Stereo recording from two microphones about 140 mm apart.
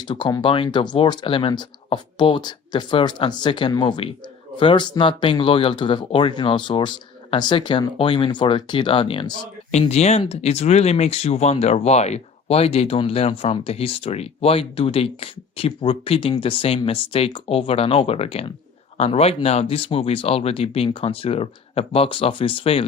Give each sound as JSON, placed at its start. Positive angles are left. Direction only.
{"t": 0.1, "sound": "speech", "side_deg": 35}
{"t": 9.7, "sound": "speech", "side_deg": 50}